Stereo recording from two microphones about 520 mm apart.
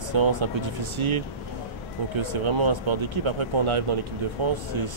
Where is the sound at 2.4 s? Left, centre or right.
Right.